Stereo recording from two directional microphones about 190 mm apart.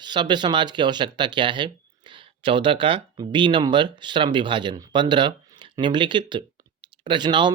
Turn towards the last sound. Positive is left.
turn(degrees=-25)  # may be behind; listen again after turning